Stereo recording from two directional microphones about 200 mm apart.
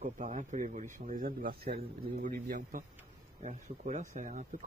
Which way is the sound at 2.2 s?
40° right (ahead or behind).